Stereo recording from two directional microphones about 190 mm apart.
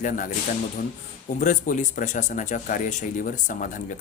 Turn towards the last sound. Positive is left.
turn(degrees=45)  # may be behind; listen again after turning